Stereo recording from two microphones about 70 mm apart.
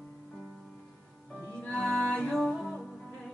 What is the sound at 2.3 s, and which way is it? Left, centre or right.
Music, centre.